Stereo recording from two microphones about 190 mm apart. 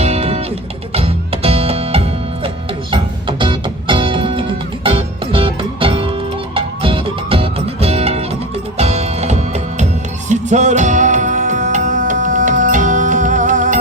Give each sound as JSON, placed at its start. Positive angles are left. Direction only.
{"t": 0.0, "sound": "music", "side_deg": -35}